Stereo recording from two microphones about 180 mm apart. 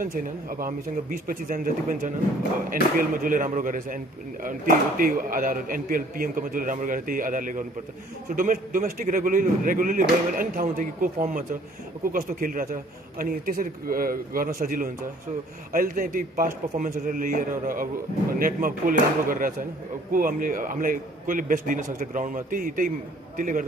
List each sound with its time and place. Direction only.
0.0 s speech: 50° right (ahead or behind)
12.1 s speech: 50° right (ahead or behind)